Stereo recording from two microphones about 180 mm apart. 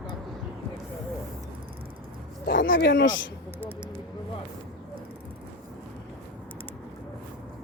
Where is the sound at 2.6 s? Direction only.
85° left.